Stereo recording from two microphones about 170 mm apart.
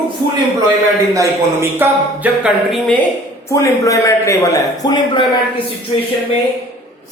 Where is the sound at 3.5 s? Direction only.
20° left (ahead or behind).